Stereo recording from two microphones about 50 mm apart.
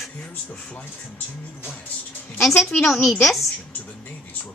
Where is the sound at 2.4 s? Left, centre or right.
Centre.